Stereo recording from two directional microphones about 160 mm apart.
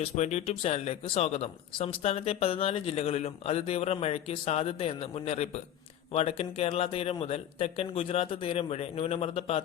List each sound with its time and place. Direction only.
0.0 s speech: 45° left (ahead or behind)